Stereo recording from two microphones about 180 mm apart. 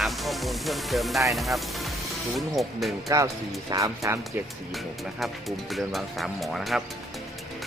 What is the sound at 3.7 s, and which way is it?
Speech, 15° right (ahead or behind).